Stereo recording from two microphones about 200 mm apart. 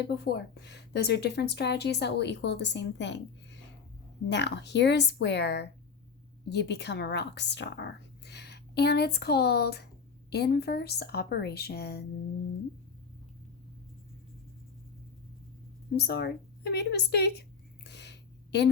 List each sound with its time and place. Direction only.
0.1 s a woman's voice: 55° left (ahead or behind)
16.0 s a woman's voice: 55° left (ahead or behind)
17.8 s a sound: 55° left (ahead or behind)